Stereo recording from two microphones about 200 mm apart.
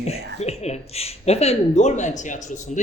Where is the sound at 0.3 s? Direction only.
30° left (ahead or behind).